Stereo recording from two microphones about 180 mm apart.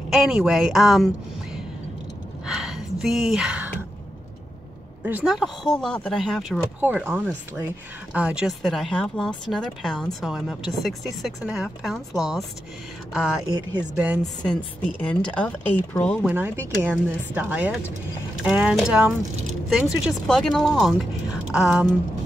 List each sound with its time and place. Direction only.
0.1 s speech: centre (ahead or behind)
2.4 s speech: 5° right (ahead or behind)
5.0 s speech: 5° right (ahead or behind)
6.8 s speech: 10° right (ahead or behind)
13.5 s speech: 25° right (ahead or behind)
13.9 s speech: 5° right (ahead or behind)
15.0 s speech: 5° left (ahead or behind)
16.3 s speech: 10° right (ahead or behind)